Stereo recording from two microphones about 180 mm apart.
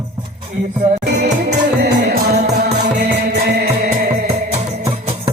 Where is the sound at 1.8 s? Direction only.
65° right (ahead or behind).